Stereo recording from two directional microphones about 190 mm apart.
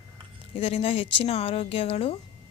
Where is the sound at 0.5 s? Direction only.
30° left (ahead or behind).